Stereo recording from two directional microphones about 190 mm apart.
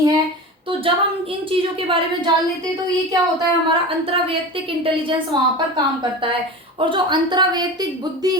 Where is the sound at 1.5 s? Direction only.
30° right (ahead or behind).